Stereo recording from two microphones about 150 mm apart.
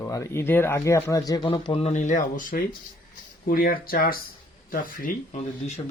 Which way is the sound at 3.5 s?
75° left (ahead or behind).